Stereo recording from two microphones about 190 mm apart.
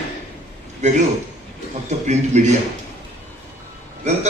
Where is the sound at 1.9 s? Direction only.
40° right (ahead or behind).